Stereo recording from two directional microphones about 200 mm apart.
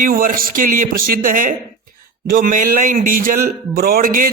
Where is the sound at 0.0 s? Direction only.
45° right (ahead or behind).